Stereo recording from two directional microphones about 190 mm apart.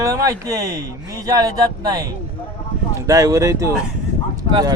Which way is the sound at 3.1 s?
15° right (ahead or behind).